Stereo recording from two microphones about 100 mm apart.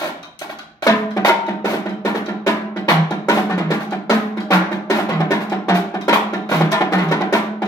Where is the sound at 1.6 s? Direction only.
35° left (ahead or behind).